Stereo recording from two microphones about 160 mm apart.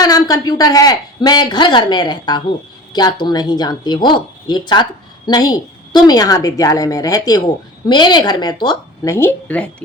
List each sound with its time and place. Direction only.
0.0 s speech: 25° left (ahead or behind)